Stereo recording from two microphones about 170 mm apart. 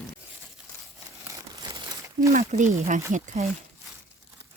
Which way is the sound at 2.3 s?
45° right (ahead or behind).